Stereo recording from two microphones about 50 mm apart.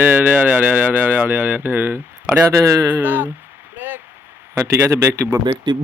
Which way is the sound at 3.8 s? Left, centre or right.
Right.